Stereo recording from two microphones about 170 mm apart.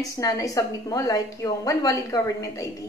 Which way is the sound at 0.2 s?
20° left (ahead or behind).